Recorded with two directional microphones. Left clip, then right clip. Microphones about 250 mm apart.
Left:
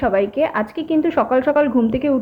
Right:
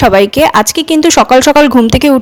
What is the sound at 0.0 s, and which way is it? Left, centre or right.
Speech, right.